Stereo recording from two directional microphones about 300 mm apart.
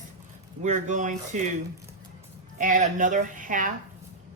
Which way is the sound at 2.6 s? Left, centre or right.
Right.